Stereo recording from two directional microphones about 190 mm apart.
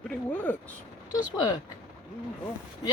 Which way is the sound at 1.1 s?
20° left (ahead or behind).